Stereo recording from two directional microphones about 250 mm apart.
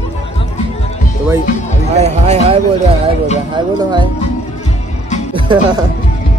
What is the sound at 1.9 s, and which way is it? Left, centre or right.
Speech, right.